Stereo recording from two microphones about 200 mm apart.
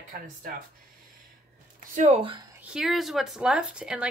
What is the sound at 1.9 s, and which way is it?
Speech, 35° right (ahead or behind).